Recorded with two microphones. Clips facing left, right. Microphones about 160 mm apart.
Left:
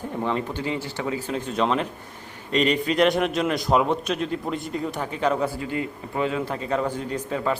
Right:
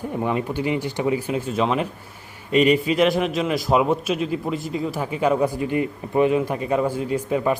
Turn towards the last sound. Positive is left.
turn(degrees=-10)  # may be behind; listen again after turning